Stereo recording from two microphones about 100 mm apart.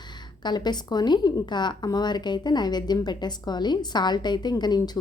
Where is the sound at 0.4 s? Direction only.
45° left (ahead or behind).